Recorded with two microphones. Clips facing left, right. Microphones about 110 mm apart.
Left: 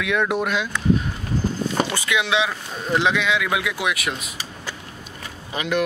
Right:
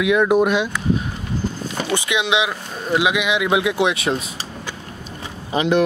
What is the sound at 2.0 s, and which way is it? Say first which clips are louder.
Speech: right 2 dB; 20° right (ahead or behind).